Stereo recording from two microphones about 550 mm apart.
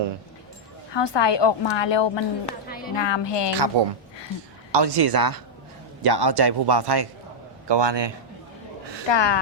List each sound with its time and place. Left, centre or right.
0.9 s a woman's voice: left
3.5 s a man's voice: right
9.0 s a woman's voice: left